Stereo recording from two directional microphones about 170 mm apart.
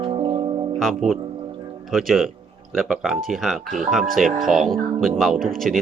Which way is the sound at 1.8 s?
Centre (ahead or behind).